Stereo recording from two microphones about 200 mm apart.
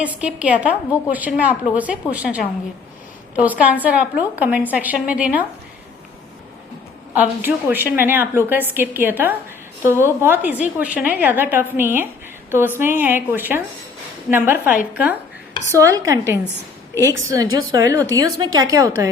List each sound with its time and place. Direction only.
0.0 s a woman's voice: 5° right (ahead or behind)
7.1 s a woman's voice: 10° right (ahead or behind)